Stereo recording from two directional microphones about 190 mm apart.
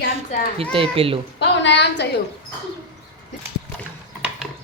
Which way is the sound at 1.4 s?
65° left (ahead or behind).